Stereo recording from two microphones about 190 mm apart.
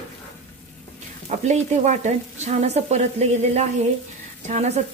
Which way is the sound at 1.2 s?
35° right (ahead or behind).